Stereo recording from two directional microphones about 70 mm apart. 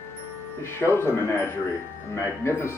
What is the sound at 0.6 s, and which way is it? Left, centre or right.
Speech, left.